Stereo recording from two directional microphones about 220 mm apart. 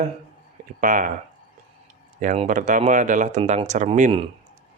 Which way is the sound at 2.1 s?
35° right (ahead or behind).